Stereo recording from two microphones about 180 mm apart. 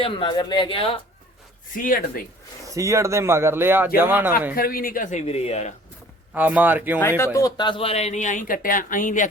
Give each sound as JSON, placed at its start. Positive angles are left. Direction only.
{"t": 0.0, "sound": "speech", "side_deg": 25}
{"t": 1.7, "sound": "speech", "side_deg": 50}
{"t": 2.6, "sound": "speech", "side_deg": -15}
{"t": 4.5, "sound": "speech", "side_deg": 55}
{"t": 5.2, "sound": "speech", "side_deg": 35}
{"t": 6.3, "sound": "speech", "side_deg": -10}
{"t": 7.3, "sound": "speech", "side_deg": 20}